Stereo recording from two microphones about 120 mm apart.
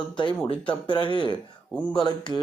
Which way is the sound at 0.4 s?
45° left (ahead or behind).